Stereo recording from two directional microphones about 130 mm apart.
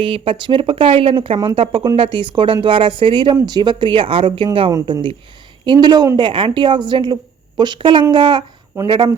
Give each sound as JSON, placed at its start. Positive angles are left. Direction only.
{"t": 0.0, "sound": "a woman's voice", "side_deg": -45}
{"t": 8.7, "sound": "speech", "side_deg": -15}